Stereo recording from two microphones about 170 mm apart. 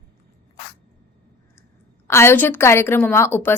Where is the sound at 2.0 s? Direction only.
15° left (ahead or behind).